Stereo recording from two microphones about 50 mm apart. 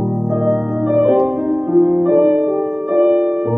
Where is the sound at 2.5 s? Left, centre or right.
Right.